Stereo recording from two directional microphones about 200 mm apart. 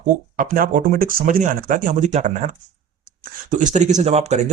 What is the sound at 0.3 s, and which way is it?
Speech, 45° right (ahead or behind).